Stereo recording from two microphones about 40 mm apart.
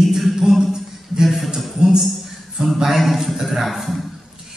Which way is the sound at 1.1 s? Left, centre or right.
Centre.